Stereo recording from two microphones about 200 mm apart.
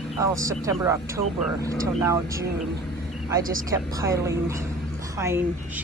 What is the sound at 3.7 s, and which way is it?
Speech, 15° right (ahead or behind).